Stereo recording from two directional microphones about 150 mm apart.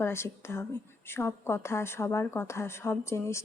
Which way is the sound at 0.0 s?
15° left (ahead or behind).